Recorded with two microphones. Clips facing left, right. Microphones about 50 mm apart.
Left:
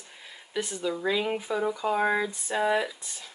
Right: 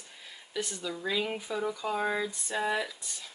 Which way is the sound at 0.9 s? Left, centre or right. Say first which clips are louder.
Left 6 dB; left.